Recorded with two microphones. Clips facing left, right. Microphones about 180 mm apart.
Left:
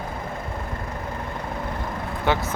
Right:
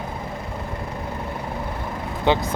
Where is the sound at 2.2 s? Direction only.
20° right (ahead or behind).